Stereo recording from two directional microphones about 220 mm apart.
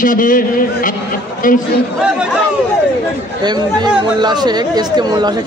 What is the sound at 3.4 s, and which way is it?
Speech, 20° right (ahead or behind).